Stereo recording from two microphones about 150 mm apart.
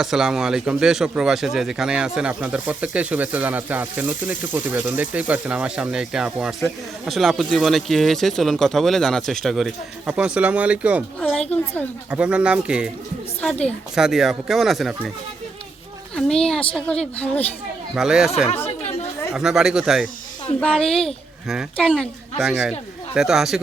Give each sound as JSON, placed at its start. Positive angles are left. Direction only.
{"t": 0.0, "sound": "speech", "side_deg": -5}
{"t": 11.3, "sound": "a woman's voice", "side_deg": 10}
{"t": 12.1, "sound": "speech", "side_deg": -5}
{"t": 13.4, "sound": "speech", "side_deg": 5}
{"t": 16.1, "sound": "speech", "side_deg": 5}
{"t": 17.9, "sound": "speech", "side_deg": -5}
{"t": 18.4, "sound": "chatter", "side_deg": 45}
{"t": 19.3, "sound": "speech", "side_deg": 0}